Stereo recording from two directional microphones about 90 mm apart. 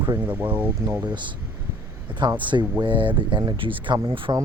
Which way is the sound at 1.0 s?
55° right (ahead or behind).